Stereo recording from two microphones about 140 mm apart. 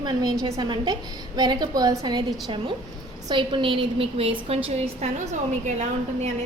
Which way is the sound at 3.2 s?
35° right (ahead or behind).